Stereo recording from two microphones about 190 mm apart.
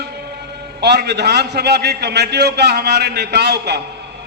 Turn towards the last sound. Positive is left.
turn(degrees=-60)  # may be behind; listen again after turning